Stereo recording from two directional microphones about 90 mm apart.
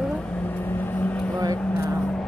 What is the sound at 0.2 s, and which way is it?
Vehicle, 15° left (ahead or behind).